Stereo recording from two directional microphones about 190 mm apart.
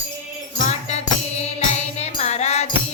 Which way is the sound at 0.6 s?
35° left (ahead or behind).